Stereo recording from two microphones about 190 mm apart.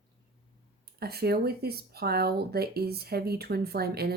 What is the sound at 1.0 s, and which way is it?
Speech, 55° right (ahead or behind).